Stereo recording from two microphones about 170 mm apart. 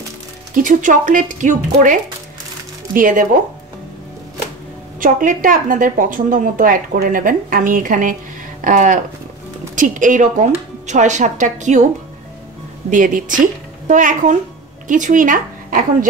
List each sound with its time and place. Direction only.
0.6 s speech: 50° right (ahead or behind)
5.0 s speech: 50° right (ahead or behind)
12.9 s speech: 50° right (ahead or behind)